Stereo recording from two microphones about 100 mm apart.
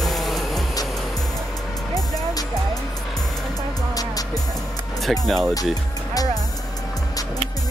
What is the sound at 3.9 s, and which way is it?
Music, 40° left (ahead or behind).